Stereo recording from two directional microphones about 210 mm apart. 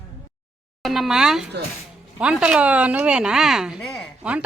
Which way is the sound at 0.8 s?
Centre (ahead or behind).